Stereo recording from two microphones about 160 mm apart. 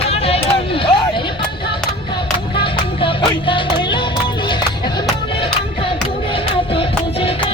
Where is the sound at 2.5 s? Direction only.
30° left (ahead or behind).